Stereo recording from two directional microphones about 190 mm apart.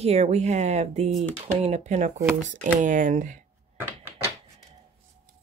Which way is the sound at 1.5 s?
35° right (ahead or behind).